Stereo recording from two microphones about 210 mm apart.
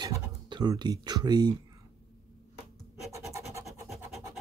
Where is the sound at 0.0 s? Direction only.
20° right (ahead or behind).